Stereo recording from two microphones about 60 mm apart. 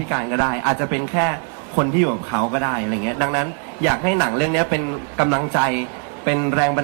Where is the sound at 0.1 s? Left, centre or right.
Right.